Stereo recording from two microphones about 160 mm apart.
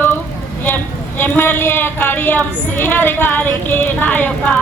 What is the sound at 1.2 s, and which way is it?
Speech, 15° left (ahead or behind).